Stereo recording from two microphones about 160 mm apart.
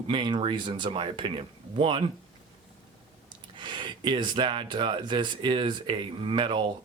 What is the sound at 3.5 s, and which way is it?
Speech, 30° right (ahead or behind).